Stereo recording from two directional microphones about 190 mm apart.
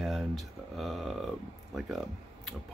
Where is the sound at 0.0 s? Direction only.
Centre (ahead or behind).